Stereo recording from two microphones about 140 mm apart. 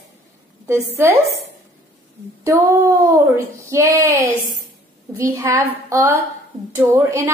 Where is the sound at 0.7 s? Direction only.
20° right (ahead or behind).